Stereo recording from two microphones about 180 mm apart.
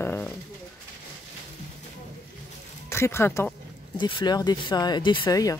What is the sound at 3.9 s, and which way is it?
Speech, 25° left (ahead or behind).